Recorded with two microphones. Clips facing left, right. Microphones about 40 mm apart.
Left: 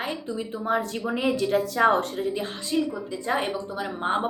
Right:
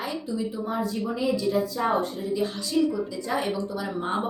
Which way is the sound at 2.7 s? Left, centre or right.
Left.